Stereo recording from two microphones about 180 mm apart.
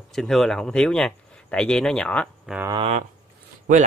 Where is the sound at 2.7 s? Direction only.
35° right (ahead or behind).